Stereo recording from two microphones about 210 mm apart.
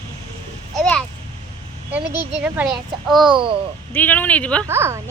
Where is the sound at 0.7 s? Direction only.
Centre (ahead or behind).